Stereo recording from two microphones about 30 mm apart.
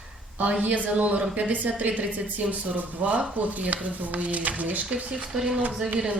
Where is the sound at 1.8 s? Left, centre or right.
Right.